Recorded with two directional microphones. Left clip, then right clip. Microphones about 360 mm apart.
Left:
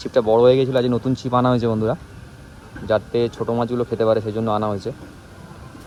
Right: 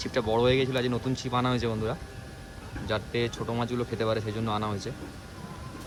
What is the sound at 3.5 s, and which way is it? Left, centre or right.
Speech, centre.